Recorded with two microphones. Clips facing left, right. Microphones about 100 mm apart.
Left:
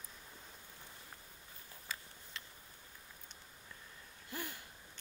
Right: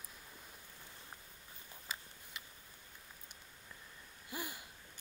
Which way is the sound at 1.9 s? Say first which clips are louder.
Even; 15° right (ahead or behind).